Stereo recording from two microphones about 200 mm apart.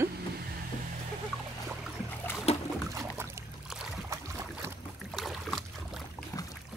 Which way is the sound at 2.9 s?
15° right (ahead or behind).